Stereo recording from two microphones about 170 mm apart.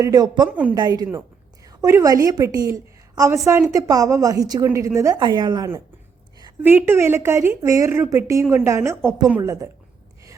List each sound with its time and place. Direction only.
0.0 s a woman's voice: 20° right (ahead or behind)